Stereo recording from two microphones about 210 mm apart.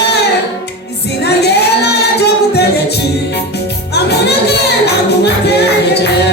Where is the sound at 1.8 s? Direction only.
50° left (ahead or behind).